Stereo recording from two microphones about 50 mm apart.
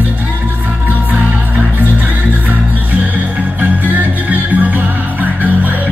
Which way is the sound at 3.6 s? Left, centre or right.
Right.